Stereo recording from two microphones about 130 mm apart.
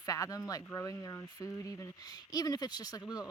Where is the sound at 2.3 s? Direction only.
30° left (ahead or behind).